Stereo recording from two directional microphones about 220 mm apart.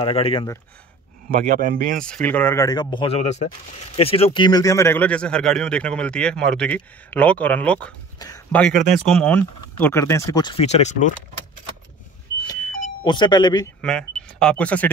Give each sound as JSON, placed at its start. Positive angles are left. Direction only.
{"t": 0.0, "sound": "speech", "side_deg": 25}
{"t": 1.3, "sound": "speech", "side_deg": -40}
{"t": 2.0, "sound": "speech", "side_deg": 5}
{"t": 12.4, "sound": "doorbell", "side_deg": 10}
{"t": 13.0, "sound": "speech", "side_deg": 20}
{"t": 13.7, "sound": "speech", "side_deg": 5}